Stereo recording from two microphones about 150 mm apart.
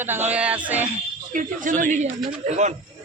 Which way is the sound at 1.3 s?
60° right (ahead or behind).